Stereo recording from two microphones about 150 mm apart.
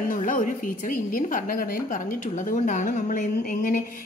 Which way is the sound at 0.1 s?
60° left (ahead or behind).